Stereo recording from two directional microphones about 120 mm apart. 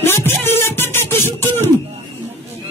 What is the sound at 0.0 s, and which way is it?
Music, 20° left (ahead or behind).